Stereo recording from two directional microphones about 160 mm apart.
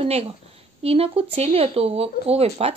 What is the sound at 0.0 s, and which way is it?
A woman's voice, 40° right (ahead or behind).